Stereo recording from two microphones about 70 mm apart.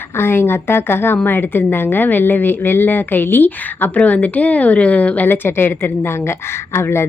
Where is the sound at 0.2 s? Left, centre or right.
Left.